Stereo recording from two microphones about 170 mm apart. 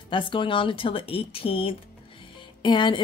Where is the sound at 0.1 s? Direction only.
30° left (ahead or behind).